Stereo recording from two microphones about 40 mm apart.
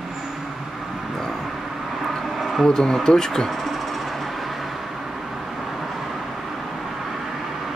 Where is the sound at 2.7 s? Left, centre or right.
Centre.